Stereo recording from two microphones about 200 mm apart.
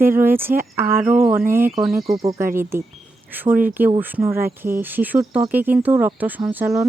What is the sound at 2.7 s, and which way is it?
Speech, 10° right (ahead or behind).